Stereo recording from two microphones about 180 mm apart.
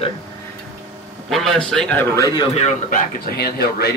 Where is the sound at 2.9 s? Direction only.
55° left (ahead or behind).